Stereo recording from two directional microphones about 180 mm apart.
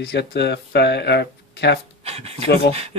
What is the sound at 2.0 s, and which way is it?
Speech, 35° right (ahead or behind).